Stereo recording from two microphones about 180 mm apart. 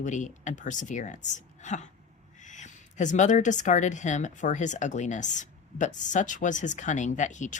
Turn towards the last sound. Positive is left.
turn(degrees=45)  # may be behind; listen again after turning